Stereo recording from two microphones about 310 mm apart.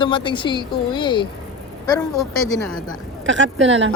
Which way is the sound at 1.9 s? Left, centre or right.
Centre.